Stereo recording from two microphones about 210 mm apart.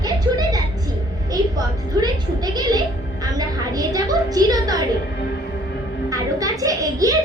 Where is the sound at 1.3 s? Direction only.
20° right (ahead or behind).